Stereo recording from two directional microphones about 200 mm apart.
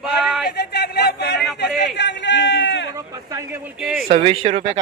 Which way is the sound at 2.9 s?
15° right (ahead or behind).